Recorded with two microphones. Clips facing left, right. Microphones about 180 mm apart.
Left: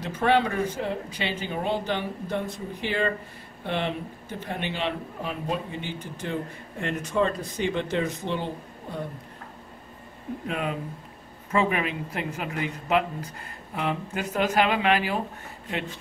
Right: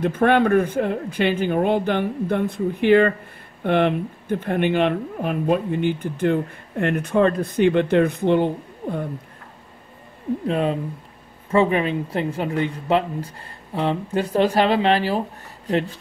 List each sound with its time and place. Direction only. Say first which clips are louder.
0.0 s speech: right 6 dB; 55° right (ahead or behind)
10.4 s speech: right 7 dB; 30° right (ahead or behind)